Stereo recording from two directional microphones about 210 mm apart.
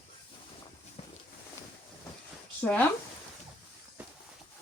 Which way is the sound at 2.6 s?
5° left (ahead or behind).